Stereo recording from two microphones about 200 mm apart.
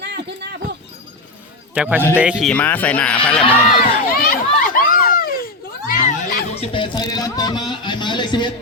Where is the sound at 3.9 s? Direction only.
45° left (ahead or behind).